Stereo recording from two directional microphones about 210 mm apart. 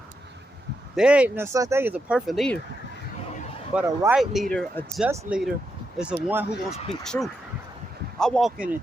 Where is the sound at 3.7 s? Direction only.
5° right (ahead or behind).